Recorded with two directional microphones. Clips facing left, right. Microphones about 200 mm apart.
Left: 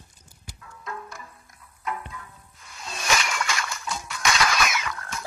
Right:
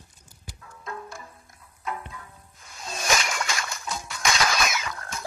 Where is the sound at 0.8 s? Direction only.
30° right (ahead or behind).